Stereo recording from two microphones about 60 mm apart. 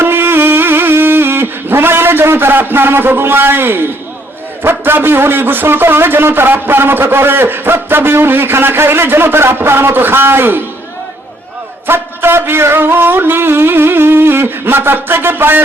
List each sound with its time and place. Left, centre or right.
0.0 s a sound: right
4.6 s a man's voice: right
11.9 s a man's voice: right